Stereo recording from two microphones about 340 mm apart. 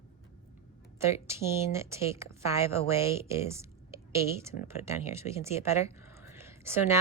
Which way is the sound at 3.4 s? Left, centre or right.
Centre.